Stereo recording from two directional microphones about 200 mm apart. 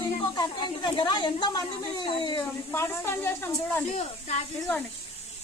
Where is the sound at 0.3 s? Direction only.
25° left (ahead or behind).